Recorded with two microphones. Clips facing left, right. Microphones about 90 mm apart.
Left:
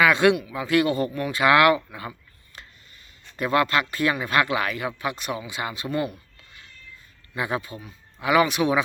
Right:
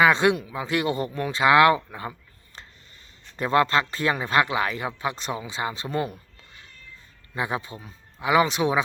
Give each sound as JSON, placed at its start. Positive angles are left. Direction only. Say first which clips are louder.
{"t": 0.0, "sound": "speech", "louder": "left 1 dB", "side_deg": -25}
{"t": 3.3, "sound": "speech", "louder": "right 1 dB", "side_deg": -30}
{"t": 7.3, "sound": "speech", "louder": "left 1 dB", "side_deg": -25}